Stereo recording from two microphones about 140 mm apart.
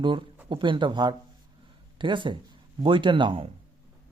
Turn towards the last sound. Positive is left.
turn(degrees=-35)  # may be behind; listen again after turning